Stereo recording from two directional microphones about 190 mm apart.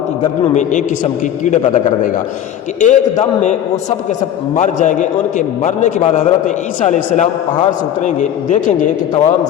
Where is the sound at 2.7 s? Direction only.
40° left (ahead or behind).